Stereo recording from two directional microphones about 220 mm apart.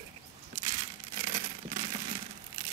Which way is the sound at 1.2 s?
25° right (ahead or behind).